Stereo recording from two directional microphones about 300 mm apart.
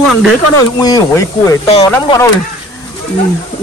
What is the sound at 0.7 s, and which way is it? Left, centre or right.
Speech, centre.